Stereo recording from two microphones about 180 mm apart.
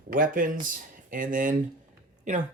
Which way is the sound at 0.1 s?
50° right (ahead or behind).